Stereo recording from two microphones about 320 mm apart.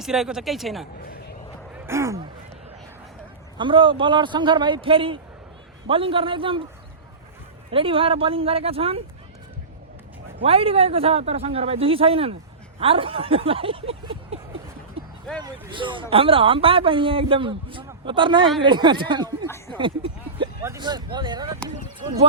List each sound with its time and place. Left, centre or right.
0.0 s speech: centre
1.0 s a sound: left
1.9 s speech: centre
3.6 s speech: centre
7.7 s speech: centre
10.4 s speech: centre
15.0 s a sound: centre
15.7 s speech: centre